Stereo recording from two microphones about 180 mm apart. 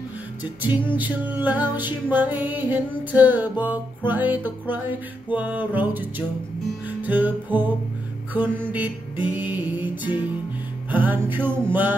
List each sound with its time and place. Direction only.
0.4 s music: 10° right (ahead or behind)